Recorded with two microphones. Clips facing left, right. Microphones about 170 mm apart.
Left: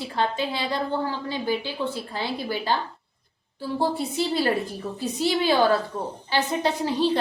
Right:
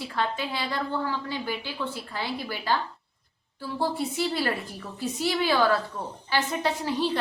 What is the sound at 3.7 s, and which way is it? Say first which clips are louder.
A woman's voice: left 3 dB; 25° left (ahead or behind).